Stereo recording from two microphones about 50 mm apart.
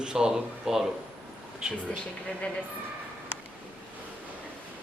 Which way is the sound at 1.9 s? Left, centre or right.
Left.